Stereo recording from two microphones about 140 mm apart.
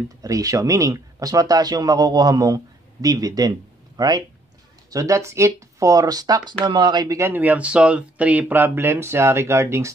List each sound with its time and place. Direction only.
0.2 s speech: 25° right (ahead or behind)
7.2 s speech: 15° right (ahead or behind)